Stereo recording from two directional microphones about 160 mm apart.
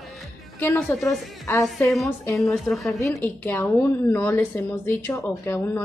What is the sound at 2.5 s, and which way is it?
Speech, centre (ahead or behind).